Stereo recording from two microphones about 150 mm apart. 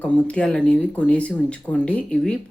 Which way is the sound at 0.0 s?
10° left (ahead or behind).